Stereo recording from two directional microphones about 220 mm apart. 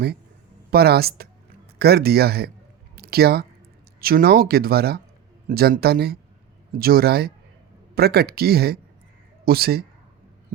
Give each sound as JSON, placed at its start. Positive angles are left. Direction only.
{"t": 0.7, "sound": "speech", "side_deg": -45}
{"t": 2.9, "sound": "a sound", "side_deg": -45}
{"t": 4.0, "sound": "speech", "side_deg": -45}